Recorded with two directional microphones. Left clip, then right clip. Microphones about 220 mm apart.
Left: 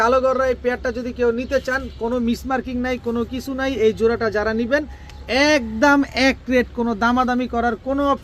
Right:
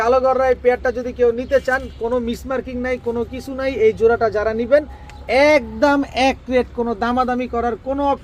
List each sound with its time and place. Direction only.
0.0 s speech: 45° left (ahead or behind)